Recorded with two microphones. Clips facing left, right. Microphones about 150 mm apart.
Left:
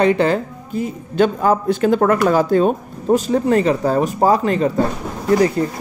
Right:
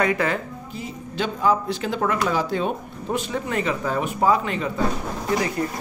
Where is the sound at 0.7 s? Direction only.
50° left (ahead or behind).